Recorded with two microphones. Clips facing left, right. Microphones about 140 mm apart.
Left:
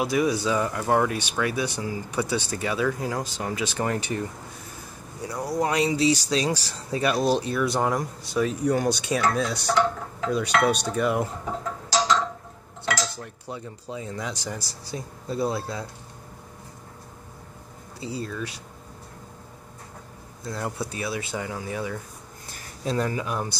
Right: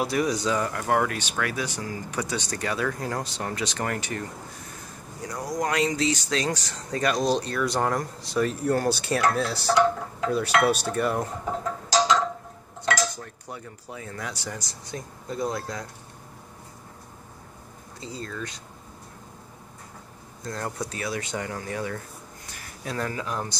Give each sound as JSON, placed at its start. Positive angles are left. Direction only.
{"t": 0.0, "sound": "speech", "side_deg": 0}
{"t": 3.8, "sound": "speech", "side_deg": 15}
{"t": 5.6, "sound": "speech", "side_deg": 10}
{"t": 9.8, "sound": "dishes", "side_deg": -10}
{"t": 13.2, "sound": "speech", "side_deg": 15}
{"t": 18.0, "sound": "speech", "side_deg": 10}
{"t": 20.4, "sound": "speech", "side_deg": 10}